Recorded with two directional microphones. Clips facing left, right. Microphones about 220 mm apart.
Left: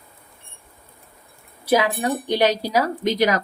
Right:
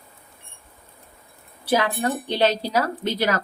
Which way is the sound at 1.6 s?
10° left (ahead or behind).